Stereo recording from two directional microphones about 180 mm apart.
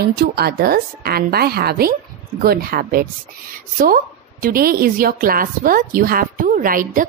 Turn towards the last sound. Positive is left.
turn(degrees=-50)  # may be behind; listen again after turning